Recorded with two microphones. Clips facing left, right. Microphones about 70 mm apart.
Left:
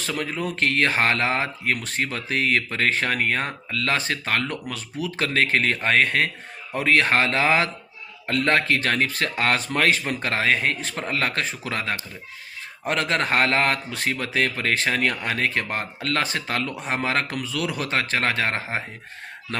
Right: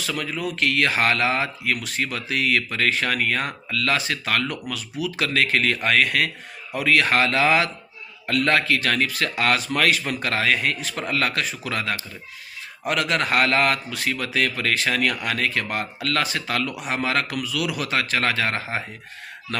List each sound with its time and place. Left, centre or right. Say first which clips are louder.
0.0 s speech: even; left